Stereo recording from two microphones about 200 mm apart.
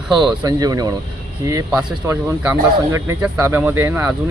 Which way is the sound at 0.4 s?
20° right (ahead or behind).